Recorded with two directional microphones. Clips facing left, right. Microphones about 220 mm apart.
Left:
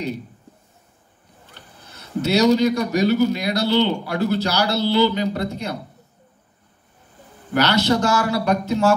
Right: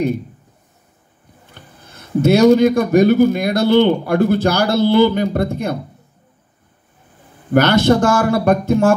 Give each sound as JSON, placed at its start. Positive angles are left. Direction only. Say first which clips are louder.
{"t": 1.4, "sound": "a man's voice", "louder": "right 3 dB", "side_deg": -50}
{"t": 7.5, "sound": "a man's voice", "louder": "right 6 dB", "side_deg": -50}